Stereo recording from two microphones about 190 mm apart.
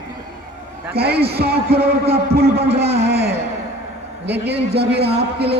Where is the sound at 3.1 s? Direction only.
60° right (ahead or behind).